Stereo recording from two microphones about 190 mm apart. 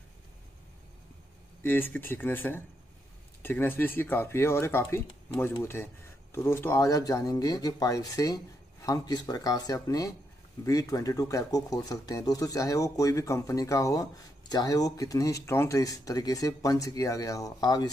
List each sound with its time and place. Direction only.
1.6 s speech: 10° left (ahead or behind)